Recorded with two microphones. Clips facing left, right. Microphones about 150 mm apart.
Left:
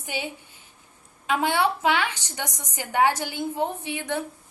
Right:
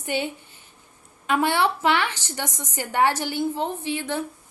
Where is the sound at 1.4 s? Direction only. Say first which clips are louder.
Right 1 dB; 15° left (ahead or behind).